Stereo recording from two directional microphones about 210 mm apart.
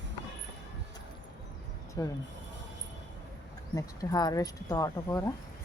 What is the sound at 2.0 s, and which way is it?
Speech, 15° left (ahead or behind).